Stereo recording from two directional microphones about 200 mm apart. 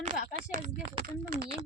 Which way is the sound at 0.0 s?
40° right (ahead or behind).